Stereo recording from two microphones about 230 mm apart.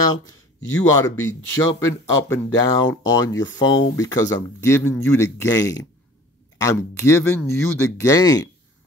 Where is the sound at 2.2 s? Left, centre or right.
Centre.